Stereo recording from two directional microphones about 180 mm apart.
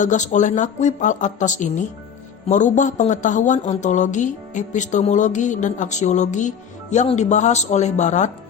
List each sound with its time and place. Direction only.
0.0 s a woman's voice: 45° left (ahead or behind)